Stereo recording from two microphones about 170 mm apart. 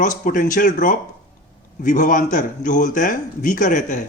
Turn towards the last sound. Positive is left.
turn(degrees=50)  # may be behind; listen again after turning